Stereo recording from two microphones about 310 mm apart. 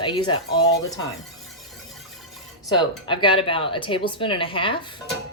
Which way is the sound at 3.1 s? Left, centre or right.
Centre.